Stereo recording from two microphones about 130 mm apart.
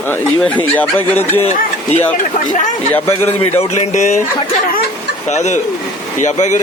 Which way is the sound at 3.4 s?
55° left (ahead or behind).